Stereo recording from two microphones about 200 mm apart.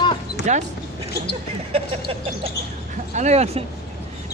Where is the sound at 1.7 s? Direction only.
30° right (ahead or behind).